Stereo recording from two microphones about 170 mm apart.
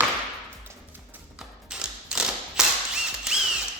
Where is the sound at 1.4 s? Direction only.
5° right (ahead or behind).